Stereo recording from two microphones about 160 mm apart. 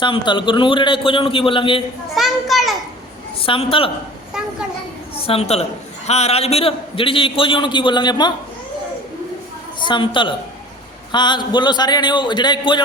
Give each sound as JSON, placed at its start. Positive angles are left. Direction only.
{"t": 0.0, "sound": "a man's voice", "side_deg": 30}
{"t": 2.1, "sound": "children playing", "side_deg": 0}
{"t": 3.4, "sound": "a man's voice", "side_deg": 35}
{"t": 4.4, "sound": "a woman's voice", "side_deg": -5}
{"t": 5.1, "sound": "a man's voice", "side_deg": 35}
{"t": 9.8, "sound": "a man's voice", "side_deg": 30}